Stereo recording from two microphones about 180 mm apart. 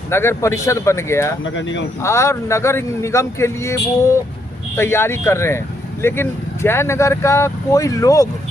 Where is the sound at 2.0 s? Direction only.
15° left (ahead or behind).